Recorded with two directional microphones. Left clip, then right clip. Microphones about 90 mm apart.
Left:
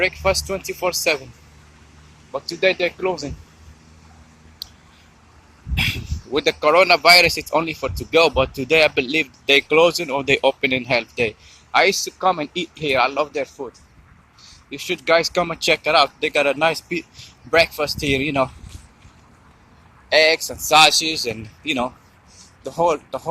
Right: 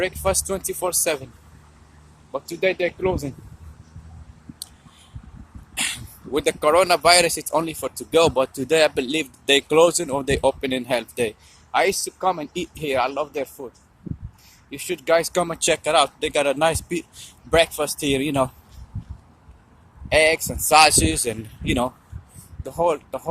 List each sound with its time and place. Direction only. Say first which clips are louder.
0.0 s speech: left 4 dB; 55° right (ahead or behind)
2.3 s speech: left 3 dB; 55° right (ahead or behind)
6.3 s speech: left 2 dB; 40° right (ahead or behind)
11.1 s speech: left 3 dB; 55° right (ahead or behind)
14.7 s speech: left 2 dB; 50° right (ahead or behind)
15.2 s speech: left 2 dB; 75° right (ahead or behind); by 18.5 s 55° right (ahead or behind)
20.1 s speech: left 2 dB; 65° right (ahead or behind); by 21.3 s 90° right
21.3 s speech: left 1 dB; 45° right (ahead or behind)